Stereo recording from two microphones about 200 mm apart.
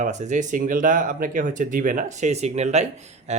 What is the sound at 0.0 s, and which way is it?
Speech, 35° right (ahead or behind).